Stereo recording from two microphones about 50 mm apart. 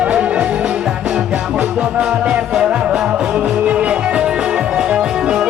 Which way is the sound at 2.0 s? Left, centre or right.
Right.